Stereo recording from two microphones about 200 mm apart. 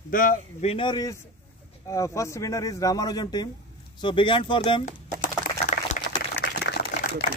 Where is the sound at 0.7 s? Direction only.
25° left (ahead or behind).